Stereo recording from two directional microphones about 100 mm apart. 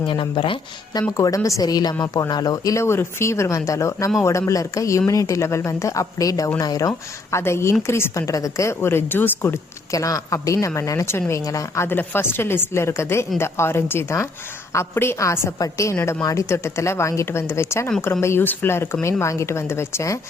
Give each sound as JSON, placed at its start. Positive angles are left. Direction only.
{"t": 0.1, "sound": "speech", "side_deg": 55}
{"t": 1.1, "sound": "a woman's voice", "side_deg": 35}
{"t": 9.9, "sound": "a woman's voice", "side_deg": 35}